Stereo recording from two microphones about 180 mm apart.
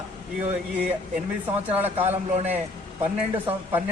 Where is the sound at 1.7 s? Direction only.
10° right (ahead or behind).